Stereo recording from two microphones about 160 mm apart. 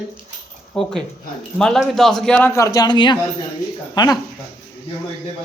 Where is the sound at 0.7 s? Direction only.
5° left (ahead or behind); by 4.1 s 25° left (ahead or behind).